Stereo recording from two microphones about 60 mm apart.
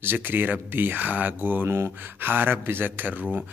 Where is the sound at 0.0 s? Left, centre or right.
Right.